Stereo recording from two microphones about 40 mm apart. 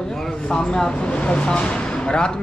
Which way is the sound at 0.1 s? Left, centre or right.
Centre.